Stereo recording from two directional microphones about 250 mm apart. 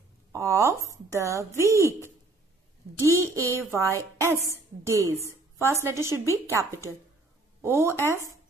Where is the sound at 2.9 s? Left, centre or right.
Centre.